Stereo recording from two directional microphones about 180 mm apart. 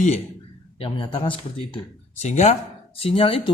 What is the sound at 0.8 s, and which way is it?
Speech, 30° left (ahead or behind).